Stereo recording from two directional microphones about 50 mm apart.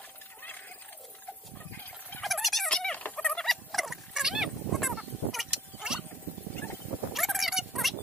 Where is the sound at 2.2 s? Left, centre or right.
Centre.